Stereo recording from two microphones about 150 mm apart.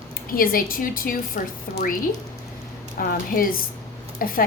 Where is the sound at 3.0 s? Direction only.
75° left (ahead or behind).